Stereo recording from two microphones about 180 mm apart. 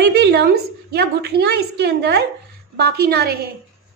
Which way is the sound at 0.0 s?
65° right (ahead or behind).